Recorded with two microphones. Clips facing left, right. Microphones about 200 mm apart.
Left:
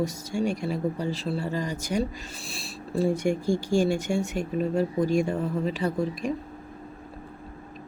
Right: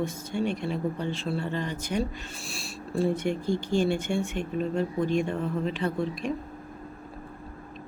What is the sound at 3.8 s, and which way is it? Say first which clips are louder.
Speech: even; 40° left (ahead or behind).